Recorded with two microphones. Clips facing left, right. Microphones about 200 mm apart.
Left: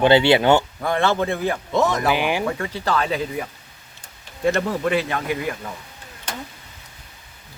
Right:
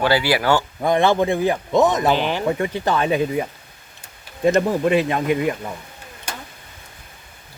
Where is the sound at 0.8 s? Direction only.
15° right (ahead or behind).